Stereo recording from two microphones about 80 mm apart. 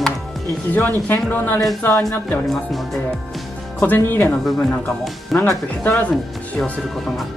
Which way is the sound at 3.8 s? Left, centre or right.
Left.